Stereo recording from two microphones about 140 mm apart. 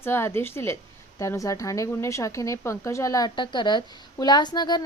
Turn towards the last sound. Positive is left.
turn(degrees=30)  # may be behind; listen again after turning